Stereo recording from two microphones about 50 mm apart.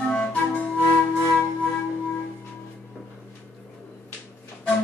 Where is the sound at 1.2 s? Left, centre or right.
Centre.